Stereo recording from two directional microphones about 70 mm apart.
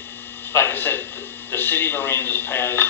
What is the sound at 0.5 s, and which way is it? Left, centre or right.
Speech, left.